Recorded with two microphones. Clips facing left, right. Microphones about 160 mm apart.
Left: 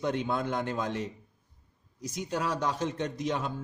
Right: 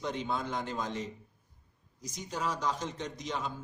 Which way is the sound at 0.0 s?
60° left (ahead or behind).